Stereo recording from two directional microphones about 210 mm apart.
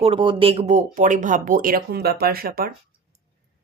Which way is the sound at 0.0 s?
25° right (ahead or behind).